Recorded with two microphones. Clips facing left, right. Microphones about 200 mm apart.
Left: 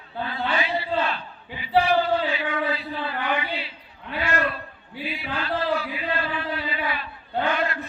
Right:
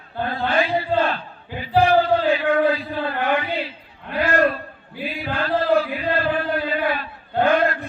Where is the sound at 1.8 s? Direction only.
50° right (ahead or behind).